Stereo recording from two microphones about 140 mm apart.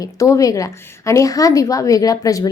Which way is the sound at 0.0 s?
25° left (ahead or behind).